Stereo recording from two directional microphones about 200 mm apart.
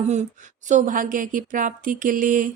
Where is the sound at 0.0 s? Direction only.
35° right (ahead or behind).